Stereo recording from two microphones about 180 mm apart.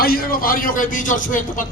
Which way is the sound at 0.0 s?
55° left (ahead or behind).